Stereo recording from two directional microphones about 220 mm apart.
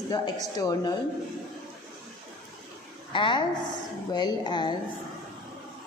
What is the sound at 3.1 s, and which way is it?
A woman's voice, 20° left (ahead or behind).